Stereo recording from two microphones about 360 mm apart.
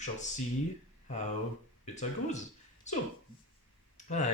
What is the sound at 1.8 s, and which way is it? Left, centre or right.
Speech, centre.